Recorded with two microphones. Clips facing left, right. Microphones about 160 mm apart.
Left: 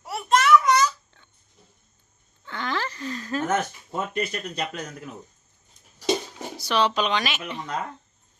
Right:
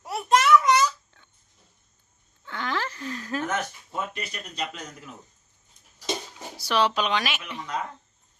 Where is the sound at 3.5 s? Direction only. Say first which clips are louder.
Left 4 dB; 50° left (ahead or behind).